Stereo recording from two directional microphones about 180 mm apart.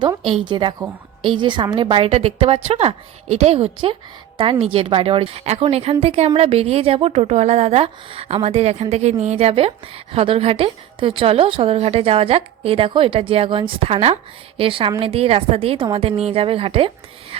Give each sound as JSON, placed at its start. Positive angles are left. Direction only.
{"t": 0.4, "sound": "a woman's voice", "side_deg": -25}